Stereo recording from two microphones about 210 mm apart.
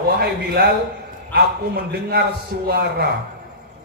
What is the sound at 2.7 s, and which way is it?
Speech, 50° right (ahead or behind).